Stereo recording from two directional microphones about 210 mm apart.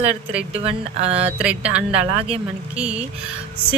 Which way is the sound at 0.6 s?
30° right (ahead or behind).